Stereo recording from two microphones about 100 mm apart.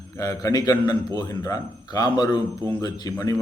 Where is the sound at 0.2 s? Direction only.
35° left (ahead or behind).